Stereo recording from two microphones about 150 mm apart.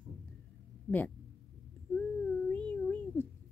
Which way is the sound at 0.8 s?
10° left (ahead or behind).